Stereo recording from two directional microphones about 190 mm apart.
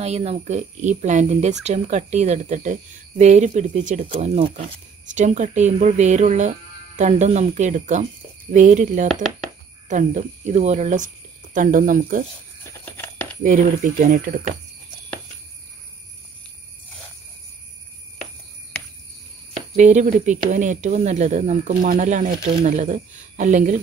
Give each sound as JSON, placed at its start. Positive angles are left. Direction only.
{"t": 0.0, "sound": "speech", "side_deg": -35}
{"t": 12.8, "sound": "a sound", "side_deg": 10}
{"t": 13.4, "sound": "speech", "side_deg": -45}
{"t": 19.7, "sound": "speech", "side_deg": -40}
{"t": 22.3, "sound": "speech", "side_deg": -25}
{"t": 22.7, "sound": "speech", "side_deg": -40}